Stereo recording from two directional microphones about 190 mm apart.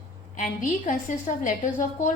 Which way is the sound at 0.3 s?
40° left (ahead or behind).